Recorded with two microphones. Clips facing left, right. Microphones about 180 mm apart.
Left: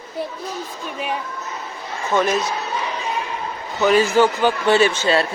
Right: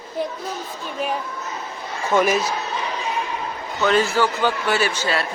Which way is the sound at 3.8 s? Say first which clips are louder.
Left 4 dB; 15° left (ahead or behind).